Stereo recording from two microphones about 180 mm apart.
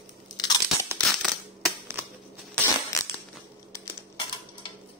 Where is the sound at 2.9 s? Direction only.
15° left (ahead or behind).